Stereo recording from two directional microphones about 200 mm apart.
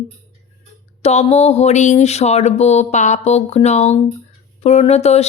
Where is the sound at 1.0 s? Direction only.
30° left (ahead or behind).